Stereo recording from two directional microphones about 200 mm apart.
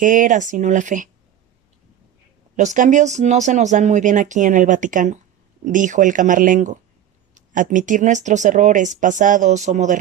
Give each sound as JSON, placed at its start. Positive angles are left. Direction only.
{"t": 0.0, "sound": "speech", "side_deg": -40}
{"t": 2.6, "sound": "speech", "side_deg": -40}